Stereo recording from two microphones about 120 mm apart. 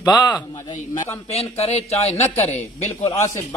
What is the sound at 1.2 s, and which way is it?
A man's voice, 60° left (ahead or behind).